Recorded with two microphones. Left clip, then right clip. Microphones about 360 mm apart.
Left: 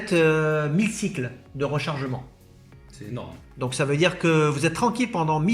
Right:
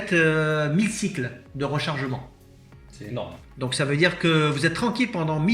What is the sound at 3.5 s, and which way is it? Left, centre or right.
Speech, centre.